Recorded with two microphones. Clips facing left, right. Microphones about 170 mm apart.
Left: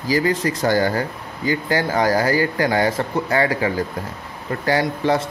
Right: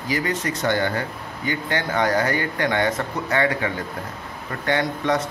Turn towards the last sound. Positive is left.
turn(degrees=30)  # may be behind; listen again after turning